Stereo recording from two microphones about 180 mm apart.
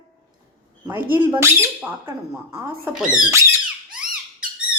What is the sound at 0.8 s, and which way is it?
Speech, 10° right (ahead or behind).